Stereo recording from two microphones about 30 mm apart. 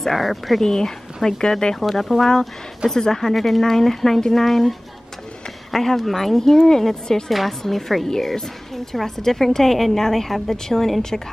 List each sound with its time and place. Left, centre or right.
0.0 s a woman's voice: centre
0.6 s speech: centre
1.8 s a woman's voice: centre
3.0 s a woman's voice: centre
3.3 s a woman's voice: centre
3.6 s a woman's voice: centre